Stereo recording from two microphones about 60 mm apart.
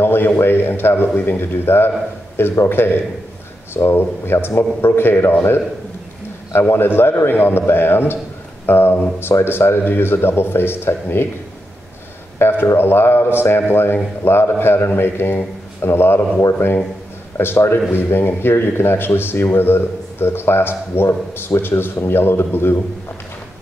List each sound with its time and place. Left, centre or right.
0.0 s a sound: left
0.4 s speech: left
6.5 s speech: left
12.4 s speech: left